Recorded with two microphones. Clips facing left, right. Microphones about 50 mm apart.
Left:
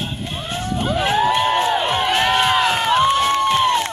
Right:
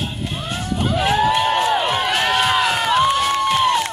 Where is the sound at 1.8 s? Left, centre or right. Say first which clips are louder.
Left 1 dB; left.